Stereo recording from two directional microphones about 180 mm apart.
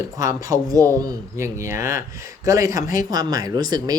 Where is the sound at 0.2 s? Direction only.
20° right (ahead or behind).